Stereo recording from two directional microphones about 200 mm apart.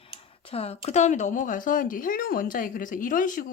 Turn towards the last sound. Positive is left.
turn(degrees=40)  # may be behind; listen again after turning